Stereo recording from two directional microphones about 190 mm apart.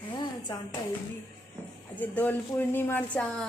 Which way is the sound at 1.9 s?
10° left (ahead or behind).